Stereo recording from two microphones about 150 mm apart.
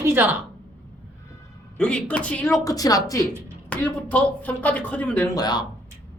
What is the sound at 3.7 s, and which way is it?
Speech, 10° left (ahead or behind).